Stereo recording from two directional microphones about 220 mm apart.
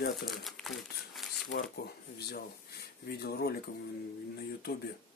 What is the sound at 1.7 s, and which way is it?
Speech, 45° left (ahead or behind).